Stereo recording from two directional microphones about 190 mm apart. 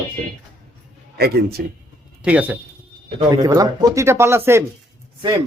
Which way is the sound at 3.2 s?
20° right (ahead or behind).